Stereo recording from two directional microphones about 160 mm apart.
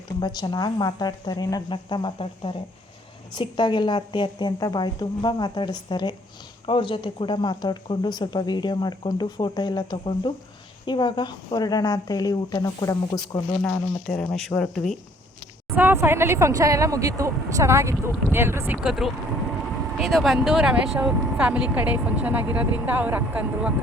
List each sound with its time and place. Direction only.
0.2 s speech: 25° left (ahead or behind)
14.1 s speech: 5° left (ahead or behind)
15.7 s speech: 10° right (ahead or behind)